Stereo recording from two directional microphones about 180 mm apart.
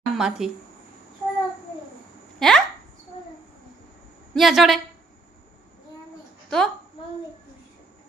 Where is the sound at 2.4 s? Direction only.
Centre (ahead or behind).